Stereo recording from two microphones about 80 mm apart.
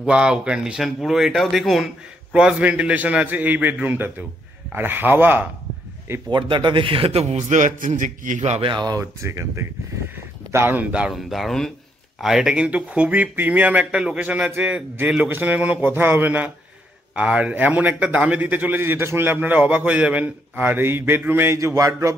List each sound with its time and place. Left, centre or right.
0.0 s a man's voice: centre
2.3 s a man's voice: centre
6.3 s speech: right
8.6 s speech: right
9.2 s a man's voice: right; by 11.1 s centre
11.1 s a man's voice: centre; by 18.8 s right
18.8 s a man's voice: right
21.5 s speech: right